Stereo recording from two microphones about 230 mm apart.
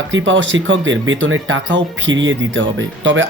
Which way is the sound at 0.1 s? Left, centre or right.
Right.